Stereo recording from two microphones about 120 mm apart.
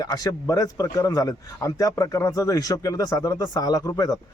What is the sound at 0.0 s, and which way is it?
A man's voice, 30° left (ahead or behind).